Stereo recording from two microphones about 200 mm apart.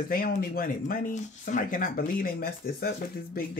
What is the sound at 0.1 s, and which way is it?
Speech, 45° left (ahead or behind).